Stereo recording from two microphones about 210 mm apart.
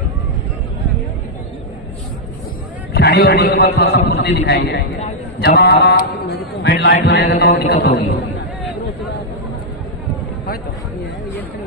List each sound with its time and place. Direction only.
2.9 s a man's voice: 50° left (ahead or behind)